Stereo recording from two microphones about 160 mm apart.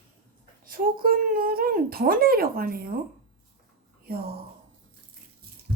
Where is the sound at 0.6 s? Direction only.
60° right (ahead or behind).